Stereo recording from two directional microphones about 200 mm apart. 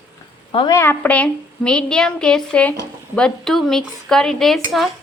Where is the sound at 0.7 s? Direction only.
10° left (ahead or behind).